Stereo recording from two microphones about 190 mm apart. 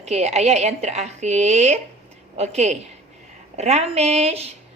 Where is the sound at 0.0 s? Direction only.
35° right (ahead or behind).